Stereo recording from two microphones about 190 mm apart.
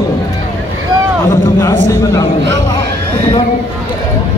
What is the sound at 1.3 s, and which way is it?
Speech, 20° left (ahead or behind).